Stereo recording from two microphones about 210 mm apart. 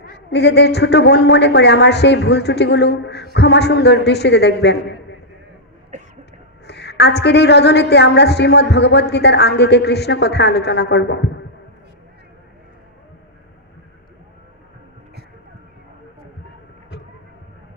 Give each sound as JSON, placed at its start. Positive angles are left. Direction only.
{"t": 0.0, "sound": "a woman's voice", "side_deg": 50}
{"t": 6.7, "sound": "a woman's voice", "side_deg": 55}